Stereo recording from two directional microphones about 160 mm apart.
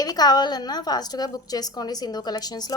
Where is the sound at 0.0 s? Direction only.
25° left (ahead or behind).